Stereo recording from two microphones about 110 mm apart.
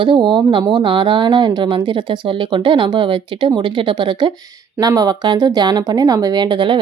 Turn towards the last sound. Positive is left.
turn(degrees=-45)  # may be behind; listen again after turning